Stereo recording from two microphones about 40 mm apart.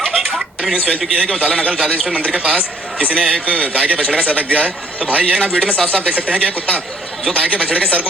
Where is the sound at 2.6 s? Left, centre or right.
Right.